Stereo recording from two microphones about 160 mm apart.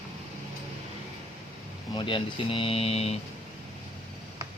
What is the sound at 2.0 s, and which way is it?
Speech, 30° left (ahead or behind).